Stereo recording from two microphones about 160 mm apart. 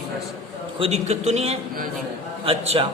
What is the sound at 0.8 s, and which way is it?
A man's voice, 45° right (ahead or behind).